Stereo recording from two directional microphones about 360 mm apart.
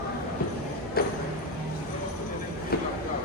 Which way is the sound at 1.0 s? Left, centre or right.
Left.